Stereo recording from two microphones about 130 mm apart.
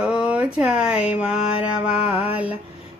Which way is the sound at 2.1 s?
50° left (ahead or behind).